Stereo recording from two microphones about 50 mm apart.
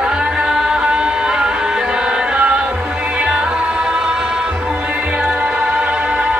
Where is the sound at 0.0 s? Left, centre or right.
Centre.